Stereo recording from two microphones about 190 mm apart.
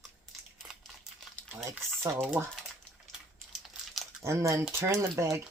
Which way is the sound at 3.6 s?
Centre (ahead or behind).